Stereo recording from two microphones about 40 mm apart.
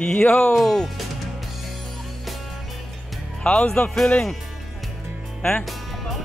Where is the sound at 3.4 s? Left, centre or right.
Centre.